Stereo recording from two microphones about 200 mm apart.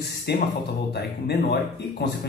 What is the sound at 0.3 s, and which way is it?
Speech, 55° left (ahead or behind).